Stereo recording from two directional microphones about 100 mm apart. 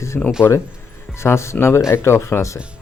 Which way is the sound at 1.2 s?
25° left (ahead or behind).